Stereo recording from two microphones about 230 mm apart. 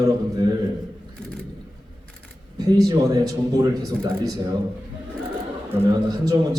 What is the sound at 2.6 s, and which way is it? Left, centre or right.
A man's voice, centre.